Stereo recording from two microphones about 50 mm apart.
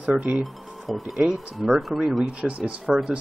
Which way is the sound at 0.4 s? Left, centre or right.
Centre.